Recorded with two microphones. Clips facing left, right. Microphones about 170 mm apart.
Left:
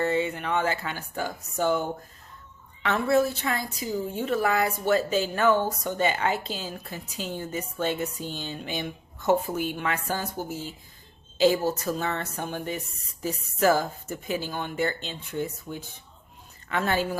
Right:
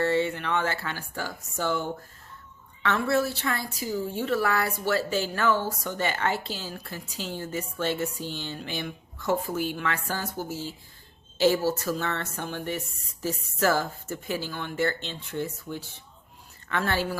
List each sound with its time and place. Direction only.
0.0 s a woman's voice: 20° left (ahead or behind)